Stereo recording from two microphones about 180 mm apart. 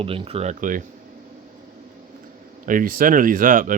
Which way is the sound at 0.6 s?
50° right (ahead or behind).